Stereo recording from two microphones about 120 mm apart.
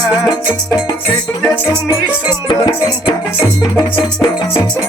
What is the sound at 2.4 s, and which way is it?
Music, 40° left (ahead or behind).